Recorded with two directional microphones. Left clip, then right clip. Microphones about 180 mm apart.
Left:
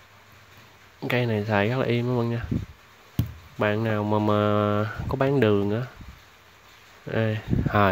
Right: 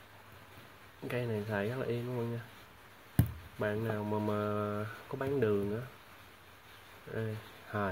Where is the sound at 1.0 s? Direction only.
30° left (ahead or behind).